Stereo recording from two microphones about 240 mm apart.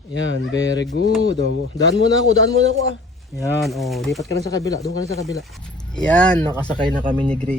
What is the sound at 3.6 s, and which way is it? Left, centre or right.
Speech, centre.